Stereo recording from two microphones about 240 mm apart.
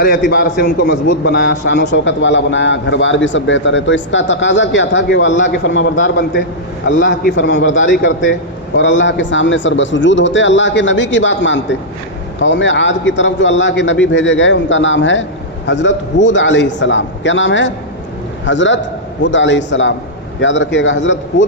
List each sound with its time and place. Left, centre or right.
0.3 s a man's voice: left